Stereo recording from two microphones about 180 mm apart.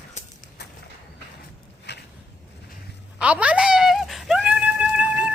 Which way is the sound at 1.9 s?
70° left (ahead or behind).